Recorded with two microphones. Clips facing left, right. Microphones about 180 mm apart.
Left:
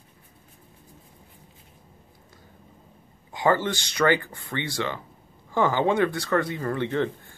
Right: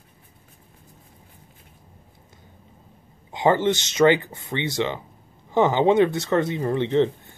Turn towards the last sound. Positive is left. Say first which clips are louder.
# right 5 dB
turn(degrees=-20)  # may be behind; listen again after turning